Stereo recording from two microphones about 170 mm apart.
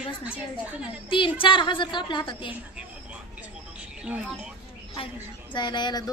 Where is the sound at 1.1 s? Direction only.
30° left (ahead or behind).